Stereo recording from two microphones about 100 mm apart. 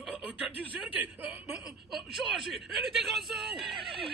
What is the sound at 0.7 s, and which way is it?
Speech, 15° right (ahead or behind).